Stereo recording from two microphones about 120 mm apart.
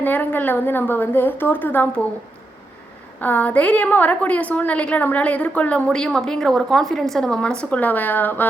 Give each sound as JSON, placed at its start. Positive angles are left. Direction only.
{"t": 0.0, "sound": "a woman's voice", "side_deg": 15}
{"t": 3.2, "sound": "a woman's voice", "side_deg": 15}